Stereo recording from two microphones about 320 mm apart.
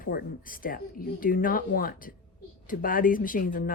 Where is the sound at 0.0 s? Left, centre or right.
Left.